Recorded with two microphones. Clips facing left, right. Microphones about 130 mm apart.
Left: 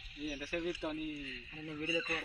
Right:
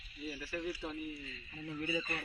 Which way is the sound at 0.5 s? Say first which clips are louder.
Left 3 dB; 15° left (ahead or behind).